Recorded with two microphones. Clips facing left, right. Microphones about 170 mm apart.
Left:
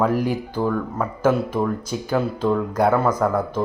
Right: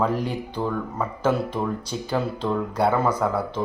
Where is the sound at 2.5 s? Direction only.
5° right (ahead or behind).